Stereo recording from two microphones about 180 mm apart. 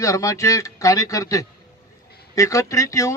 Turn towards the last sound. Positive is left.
turn(degrees=15)  # may be behind; listen again after turning